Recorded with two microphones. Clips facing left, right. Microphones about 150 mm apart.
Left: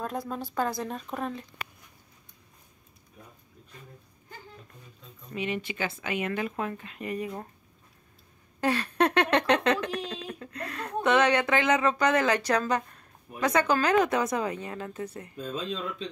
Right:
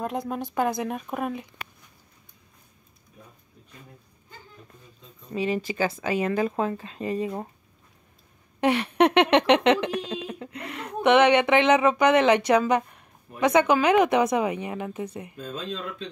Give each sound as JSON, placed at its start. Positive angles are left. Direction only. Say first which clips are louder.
{"t": 0.0, "sound": "a woman's voice", "louder": "right 4 dB", "side_deg": -15}
{"t": 5.3, "sound": "speech", "louder": "right 5 dB", "side_deg": -35}
{"t": 8.5, "sound": "a woman's voice", "louder": "right 5 dB", "side_deg": -20}